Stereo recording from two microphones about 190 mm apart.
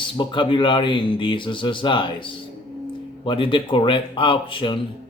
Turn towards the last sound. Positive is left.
turn(degrees=25)  # may be behind; listen again after turning